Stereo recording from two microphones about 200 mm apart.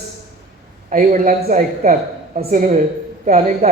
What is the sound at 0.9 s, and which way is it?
Speech, 40° right (ahead or behind).